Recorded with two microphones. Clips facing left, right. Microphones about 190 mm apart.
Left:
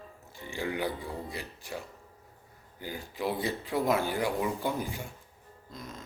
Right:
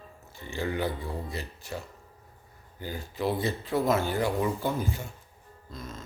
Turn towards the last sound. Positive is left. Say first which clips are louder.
# right 2 dB
turn(degrees=15)  # may be behind; listen again after turning